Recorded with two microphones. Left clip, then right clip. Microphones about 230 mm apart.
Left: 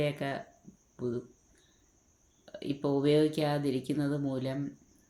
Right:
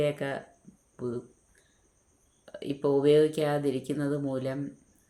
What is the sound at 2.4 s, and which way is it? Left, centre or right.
Speech, centre.